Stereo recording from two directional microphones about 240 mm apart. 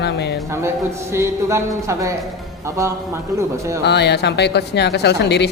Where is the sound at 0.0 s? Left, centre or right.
Left.